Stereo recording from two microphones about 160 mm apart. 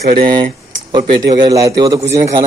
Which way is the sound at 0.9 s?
20° right (ahead or behind).